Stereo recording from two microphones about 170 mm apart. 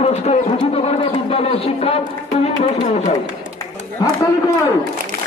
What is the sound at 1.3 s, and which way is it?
Speech, 35° left (ahead or behind).